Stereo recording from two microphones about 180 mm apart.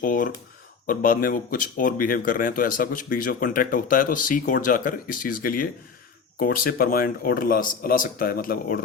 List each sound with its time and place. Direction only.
0.0 s speech: 50° left (ahead or behind)